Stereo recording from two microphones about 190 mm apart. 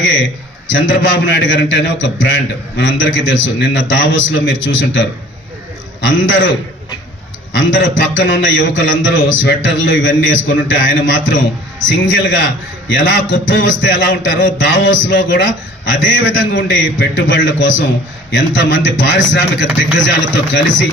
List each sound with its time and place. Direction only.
0.0 s a man's voice: 75° left (ahead or behind)